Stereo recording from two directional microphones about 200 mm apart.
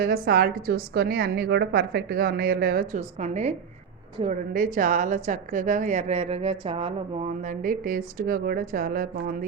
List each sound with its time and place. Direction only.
0.0 s a woman's voice: 50° right (ahead or behind)
3.0 s a woman's voice: 35° right (ahead or behind)